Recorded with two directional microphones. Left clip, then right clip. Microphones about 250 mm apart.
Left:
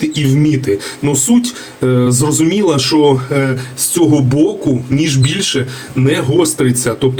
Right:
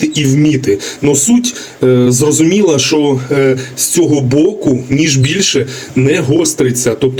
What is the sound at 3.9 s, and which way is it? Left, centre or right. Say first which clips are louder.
Speech: right 1 dB; centre.